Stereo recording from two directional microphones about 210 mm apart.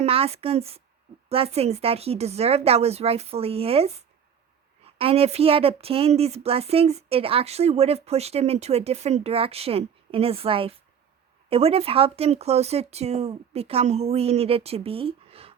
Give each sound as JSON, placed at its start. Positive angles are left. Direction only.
{"t": 0.0, "sound": "a woman's voice", "side_deg": -30}